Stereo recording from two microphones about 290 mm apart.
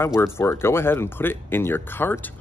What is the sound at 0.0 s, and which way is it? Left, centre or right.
Speech, centre.